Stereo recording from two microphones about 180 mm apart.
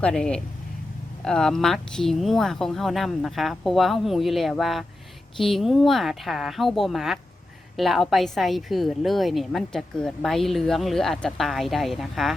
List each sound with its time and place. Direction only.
0.0 s a woman's voice: 5° left (ahead or behind)